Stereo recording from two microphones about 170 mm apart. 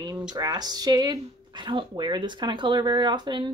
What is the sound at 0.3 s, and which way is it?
Speech, 25° right (ahead or behind).